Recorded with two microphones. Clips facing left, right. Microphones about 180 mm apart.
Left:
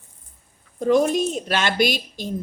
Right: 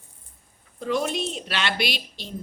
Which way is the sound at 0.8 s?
45° left (ahead or behind).